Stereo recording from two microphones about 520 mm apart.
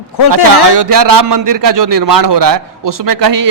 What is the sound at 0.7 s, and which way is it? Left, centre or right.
A man's voice, right.